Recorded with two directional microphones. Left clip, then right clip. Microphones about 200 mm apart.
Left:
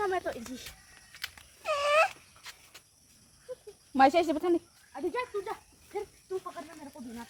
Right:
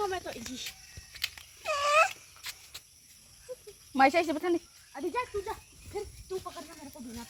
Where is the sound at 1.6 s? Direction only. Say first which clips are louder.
Even; 15° left (ahead or behind).